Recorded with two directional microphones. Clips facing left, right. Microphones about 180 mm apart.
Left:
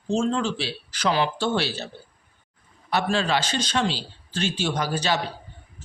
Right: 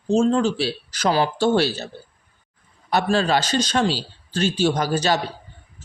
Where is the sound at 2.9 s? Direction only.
40° right (ahead or behind).